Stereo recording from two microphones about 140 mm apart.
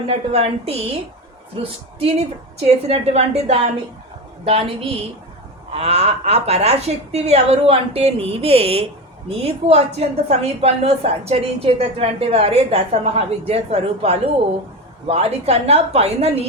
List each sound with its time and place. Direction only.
0.1 s a woman's voice: 50° right (ahead or behind)
2.0 s a woman's voice: 50° right (ahead or behind)